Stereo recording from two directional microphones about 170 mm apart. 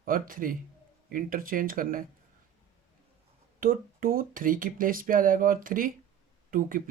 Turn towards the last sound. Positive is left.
turn(degrees=-55)  # may be behind; listen again after turning